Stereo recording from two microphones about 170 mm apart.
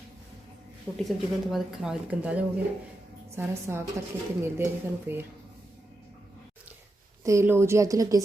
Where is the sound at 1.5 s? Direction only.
Centre (ahead or behind).